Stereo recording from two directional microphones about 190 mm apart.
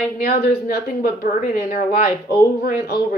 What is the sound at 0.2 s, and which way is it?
A woman's voice, 50° left (ahead or behind).